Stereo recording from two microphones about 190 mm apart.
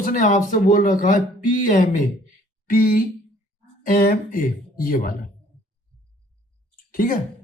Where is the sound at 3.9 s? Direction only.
45° left (ahead or behind).